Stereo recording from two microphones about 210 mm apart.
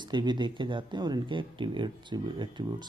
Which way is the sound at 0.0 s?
20° right (ahead or behind).